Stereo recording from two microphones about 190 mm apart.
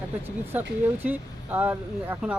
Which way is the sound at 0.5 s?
10° right (ahead or behind).